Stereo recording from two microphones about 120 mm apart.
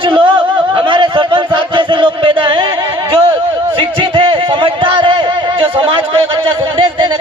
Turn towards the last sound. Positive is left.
turn(degrees=-45)  # may be behind; listen again after turning